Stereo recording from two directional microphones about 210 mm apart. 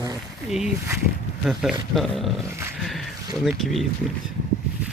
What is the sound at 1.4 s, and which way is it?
Speech, centre (ahead or behind).